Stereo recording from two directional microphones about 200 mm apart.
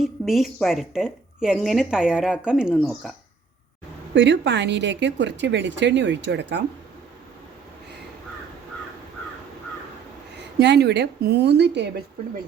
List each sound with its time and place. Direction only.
0.0 s a woman's voice: centre (ahead or behind)
4.1 s speech: 60° right (ahead or behind)
10.6 s speech: 55° right (ahead or behind)